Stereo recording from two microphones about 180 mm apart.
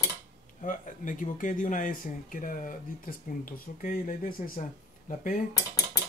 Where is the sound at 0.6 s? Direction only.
45° left (ahead or behind).